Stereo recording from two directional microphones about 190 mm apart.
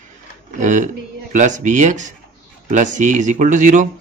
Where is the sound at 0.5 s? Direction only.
40° right (ahead or behind).